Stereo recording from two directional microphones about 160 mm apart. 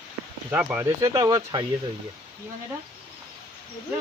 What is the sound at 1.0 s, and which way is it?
Speech, 20° right (ahead or behind).